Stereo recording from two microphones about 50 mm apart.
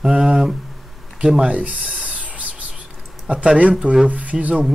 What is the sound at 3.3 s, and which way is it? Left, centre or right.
Speech, right.